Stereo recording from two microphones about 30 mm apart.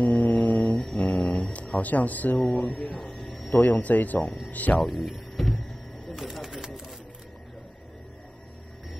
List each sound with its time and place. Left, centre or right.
0.0 s a sound: left
0.9 s a sound: left
1.5 s speech: left
2.5 s speech: left
3.5 s speech: left
4.9 s speech: centre
6.1 s typewriter: centre